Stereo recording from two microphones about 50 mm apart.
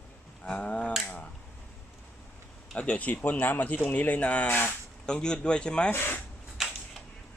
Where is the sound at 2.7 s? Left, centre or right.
Left.